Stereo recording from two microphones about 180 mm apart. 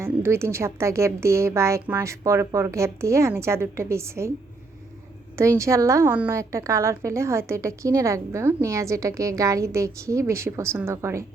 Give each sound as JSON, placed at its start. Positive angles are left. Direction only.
{"t": 0.0, "sound": "a woman's voice", "side_deg": -15}
{"t": 5.4, "sound": "a woman's voice", "side_deg": -15}